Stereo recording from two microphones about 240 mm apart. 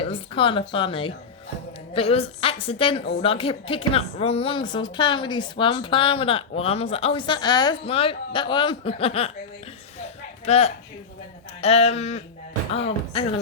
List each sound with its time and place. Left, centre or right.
0.0 s speech: left
10.4 s a woman's voice: left